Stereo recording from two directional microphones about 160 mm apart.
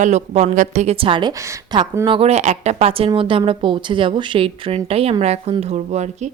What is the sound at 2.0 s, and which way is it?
A woman's voice, 35° right (ahead or behind).